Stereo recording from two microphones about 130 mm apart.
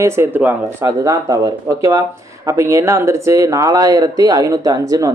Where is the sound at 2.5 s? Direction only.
25° right (ahead or behind).